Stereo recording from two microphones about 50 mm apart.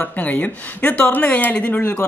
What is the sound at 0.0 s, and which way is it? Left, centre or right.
Speech, left.